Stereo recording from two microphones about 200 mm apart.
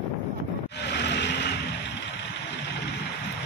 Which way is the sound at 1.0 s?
60° left (ahead or behind).